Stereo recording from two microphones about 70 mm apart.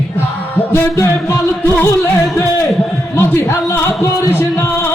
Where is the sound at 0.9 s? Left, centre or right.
Left.